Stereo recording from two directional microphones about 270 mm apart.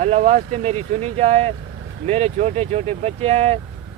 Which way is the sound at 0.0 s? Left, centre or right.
Right.